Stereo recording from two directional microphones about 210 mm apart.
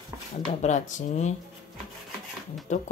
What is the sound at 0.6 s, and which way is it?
Speech, 35° left (ahead or behind).